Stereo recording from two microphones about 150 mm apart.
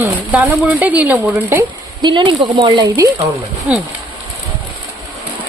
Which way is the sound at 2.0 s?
30° right (ahead or behind).